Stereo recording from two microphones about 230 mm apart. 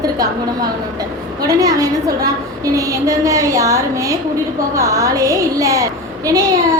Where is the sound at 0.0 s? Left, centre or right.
Centre.